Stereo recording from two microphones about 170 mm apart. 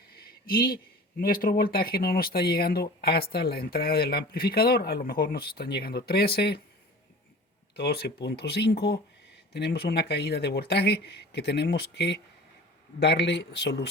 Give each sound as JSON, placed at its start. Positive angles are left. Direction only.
{"t": 0.1, "sound": "speech", "side_deg": 65}
{"t": 7.8, "sound": "speech", "side_deg": 70}